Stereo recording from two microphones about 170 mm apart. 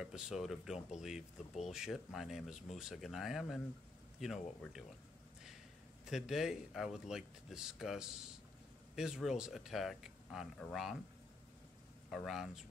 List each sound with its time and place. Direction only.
0.0 s speech: 5° right (ahead or behind)
6.0 s speech: 5° right (ahead or behind)
12.1 s speech: centre (ahead or behind)